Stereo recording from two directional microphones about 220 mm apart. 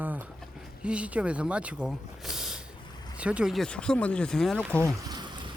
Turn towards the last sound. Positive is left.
turn(degrees=-20)  # may be behind; listen again after turning